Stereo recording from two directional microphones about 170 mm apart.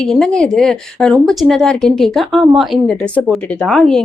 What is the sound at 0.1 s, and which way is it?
Speech, 5° left (ahead or behind).